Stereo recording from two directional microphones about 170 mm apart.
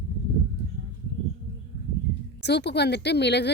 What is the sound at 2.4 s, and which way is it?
Speech, 80° left.